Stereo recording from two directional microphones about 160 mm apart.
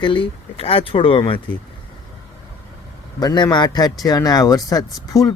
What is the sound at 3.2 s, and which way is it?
Speech, 25° left (ahead or behind).